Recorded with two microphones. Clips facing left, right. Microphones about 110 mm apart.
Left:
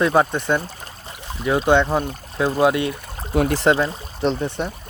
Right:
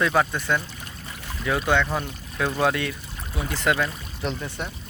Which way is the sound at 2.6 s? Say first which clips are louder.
Left 6 dB; 20° left (ahead or behind).